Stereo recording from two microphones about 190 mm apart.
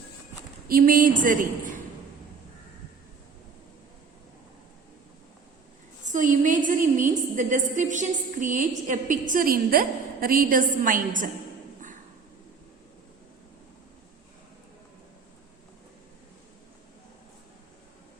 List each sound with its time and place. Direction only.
0.7 s a woman's voice: 45° right (ahead or behind)
6.1 s a woman's voice: 40° right (ahead or behind)